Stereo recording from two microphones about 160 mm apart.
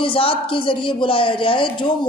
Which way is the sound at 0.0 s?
35° left (ahead or behind).